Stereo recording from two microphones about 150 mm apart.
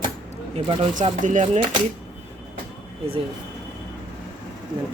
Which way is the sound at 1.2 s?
55° right (ahead or behind).